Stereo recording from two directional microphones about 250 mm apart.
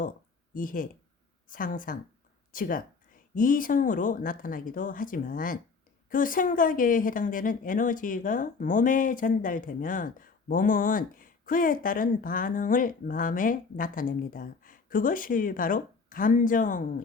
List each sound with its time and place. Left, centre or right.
0.5 s speech: left